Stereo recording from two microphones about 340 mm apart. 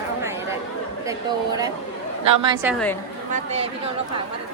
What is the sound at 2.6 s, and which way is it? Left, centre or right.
Speech, centre.